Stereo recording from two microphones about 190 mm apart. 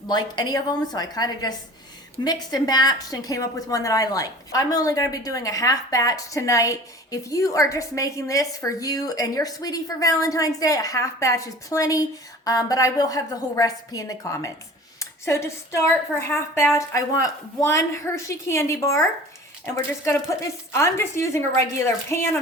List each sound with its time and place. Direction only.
0.1 s a woman's voice: 20° left (ahead or behind)
20.1 s a woman's voice: 15° left (ahead or behind)